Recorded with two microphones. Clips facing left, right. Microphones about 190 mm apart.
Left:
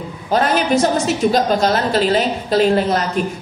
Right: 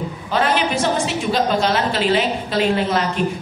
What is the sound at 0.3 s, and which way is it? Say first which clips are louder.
A woman's voice: left 4 dB; 40° left (ahead or behind).